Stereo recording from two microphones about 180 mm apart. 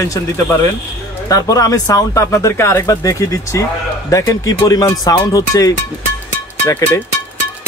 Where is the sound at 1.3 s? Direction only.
20° left (ahead or behind).